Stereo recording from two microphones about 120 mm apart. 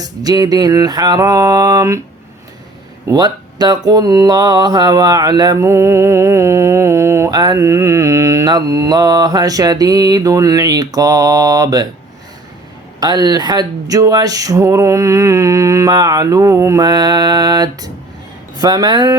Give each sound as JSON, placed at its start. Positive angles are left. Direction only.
{"t": 0.0, "sound": "mantra", "side_deg": -30}
{"t": 3.1, "sound": "speech", "side_deg": -35}
{"t": 7.3, "sound": "mantra", "side_deg": -30}
{"t": 13.0, "sound": "speech", "side_deg": -35}
{"t": 18.6, "sound": "mantra", "side_deg": -35}